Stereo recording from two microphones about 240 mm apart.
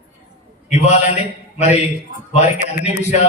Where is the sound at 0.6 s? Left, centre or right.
Left.